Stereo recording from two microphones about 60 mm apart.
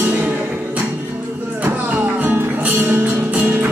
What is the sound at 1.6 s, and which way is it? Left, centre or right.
Music, right.